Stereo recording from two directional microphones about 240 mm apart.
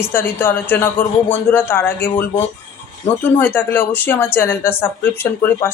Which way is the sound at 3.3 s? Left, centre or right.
Centre.